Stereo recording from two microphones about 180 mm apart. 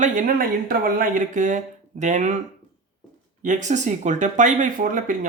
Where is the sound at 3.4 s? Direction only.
40° right (ahead or behind).